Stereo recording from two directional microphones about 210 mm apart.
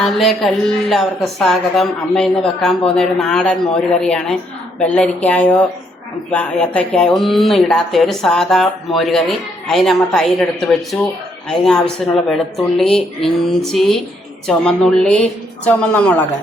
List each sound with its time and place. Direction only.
0.0 s speech: centre (ahead or behind)